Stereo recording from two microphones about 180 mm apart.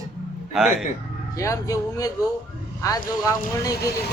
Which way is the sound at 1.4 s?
20° left (ahead or behind).